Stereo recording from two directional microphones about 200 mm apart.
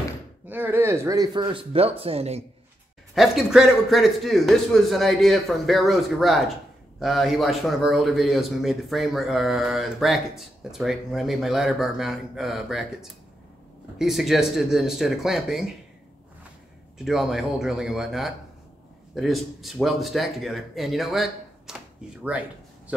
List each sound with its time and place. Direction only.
0.5 s speech: 10° right (ahead or behind); by 2.4 s 30° right (ahead or behind)
3.2 s speech: centre (ahead or behind)
17.0 s speech: centre (ahead or behind)